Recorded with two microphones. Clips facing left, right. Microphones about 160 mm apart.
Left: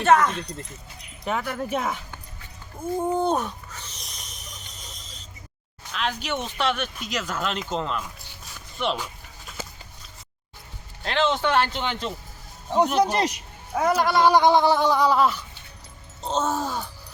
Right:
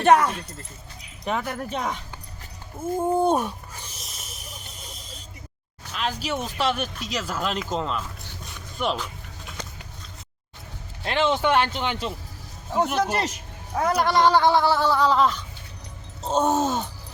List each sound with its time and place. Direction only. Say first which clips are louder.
0.0 s speech: right 1 dB; 15° right (ahead or behind)
1.2 s speech: even; centre (ahead or behind)
3.1 s a sound: right 3 dB; 10° right (ahead or behind)
6.2 s speech: right 2 dB; 5° right (ahead or behind)
6.7 s speech: right 1 dB; 40° right (ahead or behind)
7.1 s speech: even; centre (ahead or behind)
7.9 s a sound: even; 5° left (ahead or behind)
11.0 s speech: right 1 dB; 10° right (ahead or behind)
12.7 s speech: left 3 dB; 15° left (ahead or behind)
16.2 s groan: right 4 dB; 15° right (ahead or behind)